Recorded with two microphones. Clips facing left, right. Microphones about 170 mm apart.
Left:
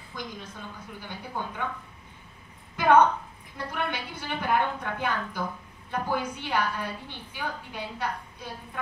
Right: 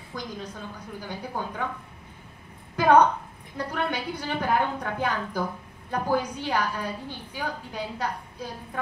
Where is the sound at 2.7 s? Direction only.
35° right (ahead or behind).